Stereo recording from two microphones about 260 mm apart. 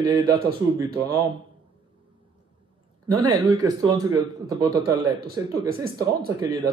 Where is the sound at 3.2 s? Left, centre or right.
Centre.